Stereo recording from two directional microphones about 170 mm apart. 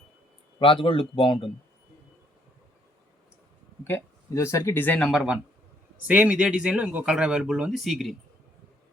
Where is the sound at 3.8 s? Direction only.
15° left (ahead or behind).